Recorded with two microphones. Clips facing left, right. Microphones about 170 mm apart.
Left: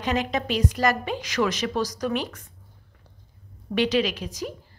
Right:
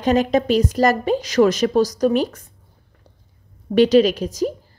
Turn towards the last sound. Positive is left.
turn(degrees=-40)  # may be behind; listen again after turning